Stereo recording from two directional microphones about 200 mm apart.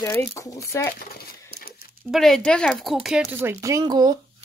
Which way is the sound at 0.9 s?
50° left (ahead or behind).